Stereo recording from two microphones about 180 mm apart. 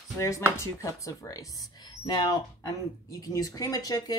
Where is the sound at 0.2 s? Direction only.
15° left (ahead or behind).